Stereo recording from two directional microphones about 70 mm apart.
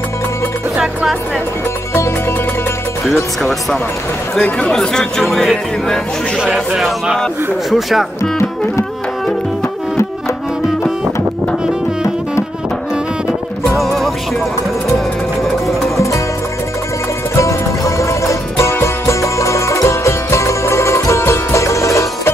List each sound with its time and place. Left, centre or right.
4.4 s speech: centre
5.2 s music: centre
8.2 s music: left
13.7 s music: centre
17.4 s music: left